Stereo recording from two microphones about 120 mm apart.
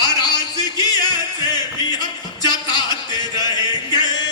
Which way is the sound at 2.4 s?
35° left (ahead or behind).